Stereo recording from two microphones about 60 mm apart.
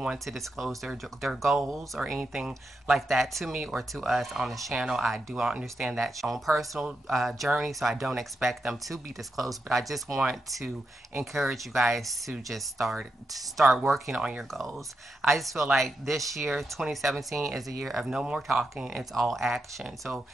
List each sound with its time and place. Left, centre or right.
0.2 s speech: centre
5.9 s speech: centre
18.0 s speech: centre
18.9 s speech: centre
20.1 s speech: right